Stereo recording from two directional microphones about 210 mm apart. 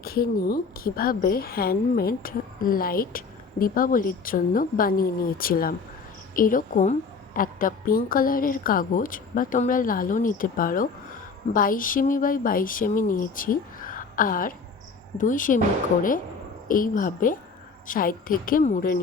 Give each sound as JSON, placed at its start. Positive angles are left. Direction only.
{"t": 0.0, "sound": "a woman's voice", "side_deg": 45}
{"t": 16.6, "sound": "a woman's voice", "side_deg": 40}